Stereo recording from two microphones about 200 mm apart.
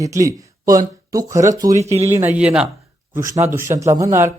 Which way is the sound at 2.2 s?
5° right (ahead or behind).